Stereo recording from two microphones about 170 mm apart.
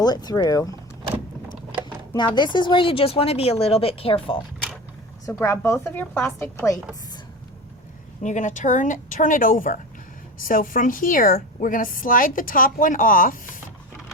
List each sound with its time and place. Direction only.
0.0 s speech: 25° left (ahead or behind)
2.1 s speech: 25° left (ahead or behind)
5.2 s a woman's voice: 15° left (ahead or behind)
8.2 s a woman's voice: 45° left (ahead or behind)